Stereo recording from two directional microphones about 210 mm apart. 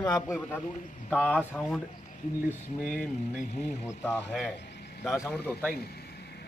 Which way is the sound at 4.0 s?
5° left (ahead or behind).